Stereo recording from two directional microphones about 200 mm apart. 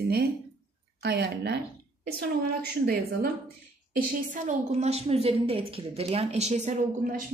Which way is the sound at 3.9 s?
40° right (ahead or behind).